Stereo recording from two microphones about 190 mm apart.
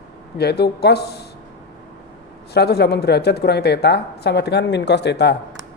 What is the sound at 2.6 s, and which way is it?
A woman's voice, 60° left (ahead or behind).